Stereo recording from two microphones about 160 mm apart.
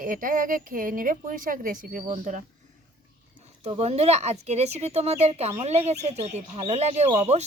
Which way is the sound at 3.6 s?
40° right (ahead or behind).